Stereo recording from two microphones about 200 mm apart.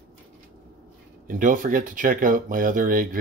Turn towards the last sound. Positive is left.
turn(degrees=-45)  # may be behind; listen again after turning